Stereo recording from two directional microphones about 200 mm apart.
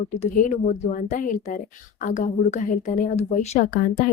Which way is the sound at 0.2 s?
40° left (ahead or behind).